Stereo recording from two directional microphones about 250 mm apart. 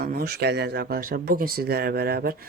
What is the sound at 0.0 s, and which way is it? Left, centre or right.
Speech, right.